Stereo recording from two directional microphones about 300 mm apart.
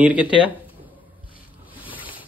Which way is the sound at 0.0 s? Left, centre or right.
Centre.